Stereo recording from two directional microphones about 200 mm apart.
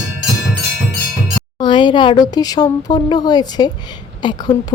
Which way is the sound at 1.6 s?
20° left (ahead or behind).